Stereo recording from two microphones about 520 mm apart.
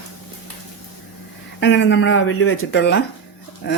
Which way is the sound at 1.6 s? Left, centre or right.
Centre.